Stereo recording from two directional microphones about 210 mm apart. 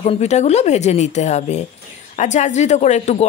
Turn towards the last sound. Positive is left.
turn(degrees=30)  # may be behind; listen again after turning